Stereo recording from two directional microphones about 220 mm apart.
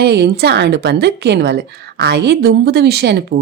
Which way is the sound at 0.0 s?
50° right (ahead or behind).